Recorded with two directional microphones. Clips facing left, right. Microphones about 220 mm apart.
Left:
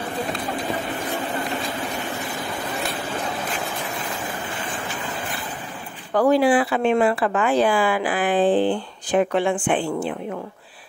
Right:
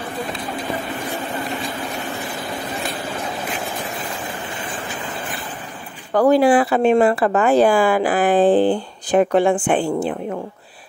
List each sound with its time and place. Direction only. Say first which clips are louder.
6.1 s speech: right 3 dB; 45° right (ahead or behind)